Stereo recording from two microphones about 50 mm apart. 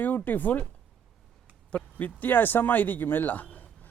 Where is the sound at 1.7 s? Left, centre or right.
Left.